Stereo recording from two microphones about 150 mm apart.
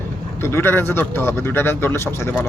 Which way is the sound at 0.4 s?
15° left (ahead or behind).